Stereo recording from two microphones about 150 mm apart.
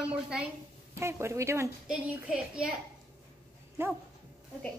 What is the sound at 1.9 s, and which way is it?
Speech, 5° right (ahead or behind).